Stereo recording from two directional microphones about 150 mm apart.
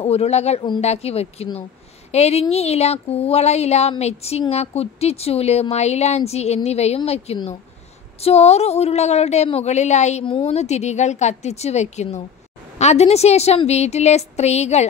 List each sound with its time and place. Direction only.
0.0 s a woman's voice: 45° left (ahead or behind)